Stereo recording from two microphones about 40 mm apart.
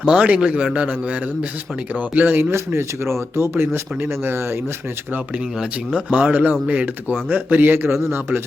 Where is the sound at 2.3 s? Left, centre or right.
Right.